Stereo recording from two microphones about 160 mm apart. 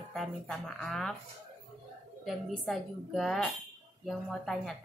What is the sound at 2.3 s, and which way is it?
A woman's voice, centre (ahead or behind).